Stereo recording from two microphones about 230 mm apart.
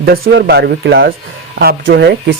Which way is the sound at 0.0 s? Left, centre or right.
Right.